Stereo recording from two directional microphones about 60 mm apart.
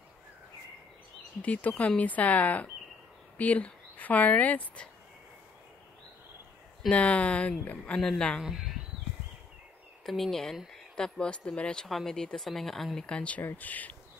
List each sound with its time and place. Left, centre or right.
1.4 s speech: left
6.9 s speech: left
8.4 s speech: centre
10.0 s speech: centre
13.0 s speech: centre
13.4 s speech: left